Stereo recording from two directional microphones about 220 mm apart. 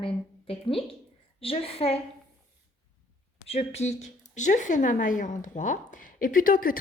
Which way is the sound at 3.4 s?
30° left (ahead or behind).